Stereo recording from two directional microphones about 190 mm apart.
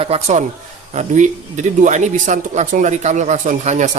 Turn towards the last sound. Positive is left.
turn(degrees=-40)  # may be behind; listen again after turning